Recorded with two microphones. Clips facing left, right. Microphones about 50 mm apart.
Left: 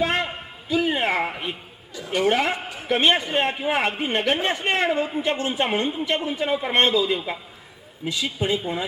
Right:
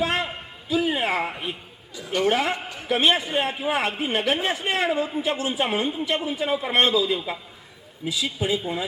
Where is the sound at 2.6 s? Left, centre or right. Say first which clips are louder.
Left 1 dB; centre.